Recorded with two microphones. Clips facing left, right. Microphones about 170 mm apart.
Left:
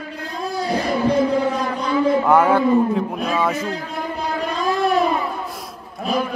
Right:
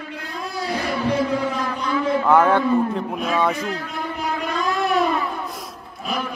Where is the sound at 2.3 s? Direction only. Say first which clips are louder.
Right 1 dB; 10° left (ahead or behind).